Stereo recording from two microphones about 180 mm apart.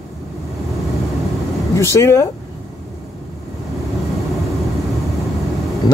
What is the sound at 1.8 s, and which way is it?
Speech, 15° left (ahead or behind).